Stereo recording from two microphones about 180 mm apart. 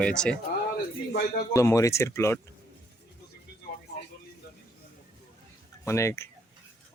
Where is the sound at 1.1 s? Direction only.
60° left (ahead or behind).